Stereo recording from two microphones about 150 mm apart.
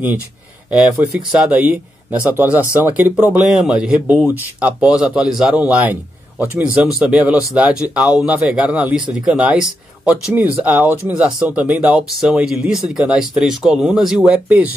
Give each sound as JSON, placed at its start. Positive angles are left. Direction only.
{"t": 0.7, "sound": "speech", "side_deg": -5}